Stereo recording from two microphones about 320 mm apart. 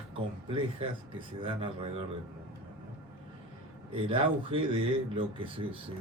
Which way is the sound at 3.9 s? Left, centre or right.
Centre.